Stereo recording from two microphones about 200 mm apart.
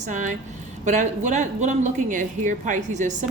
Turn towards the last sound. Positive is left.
turn(degrees=-40)  # may be behind; listen again after turning